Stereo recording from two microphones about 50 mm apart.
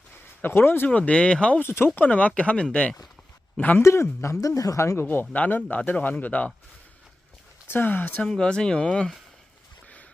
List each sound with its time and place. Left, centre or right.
0.4 s speech: left
0.9 s speech: left
1.6 s speech: left
2.0 s speech: left
3.6 s speech: left
3.8 s speech: left
4.9 s speech: left
5.3 s speech: left
7.7 s speech: left
8.3 s speech: centre